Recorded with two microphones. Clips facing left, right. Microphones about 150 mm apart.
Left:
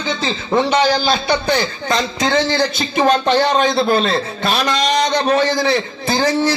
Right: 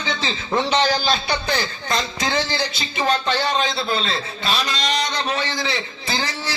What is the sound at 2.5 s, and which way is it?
A man's voice, 50° left (ahead or behind).